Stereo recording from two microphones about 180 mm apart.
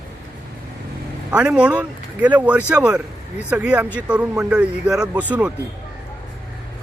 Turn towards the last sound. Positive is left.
turn(degrees=-5)  # may be behind; listen again after turning